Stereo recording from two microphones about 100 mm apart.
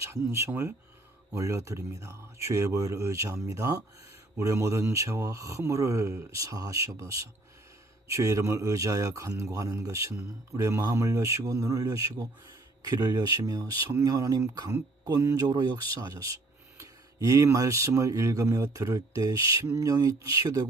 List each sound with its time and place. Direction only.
0.0 s speech: 25° right (ahead or behind)
15.4 s speech: 45° right (ahead or behind)